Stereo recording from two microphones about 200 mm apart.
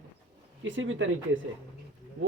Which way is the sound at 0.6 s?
70° right (ahead or behind).